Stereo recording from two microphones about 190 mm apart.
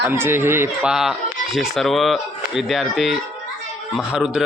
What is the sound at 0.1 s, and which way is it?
A man's voice, 10° right (ahead or behind).